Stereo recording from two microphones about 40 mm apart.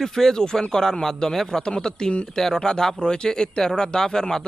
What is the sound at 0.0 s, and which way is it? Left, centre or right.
Speech, centre.